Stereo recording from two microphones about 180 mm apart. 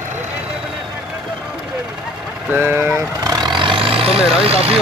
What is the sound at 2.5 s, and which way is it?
Speech, 10° right (ahead or behind).